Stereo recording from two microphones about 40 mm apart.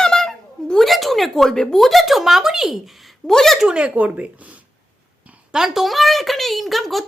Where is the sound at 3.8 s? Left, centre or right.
Right.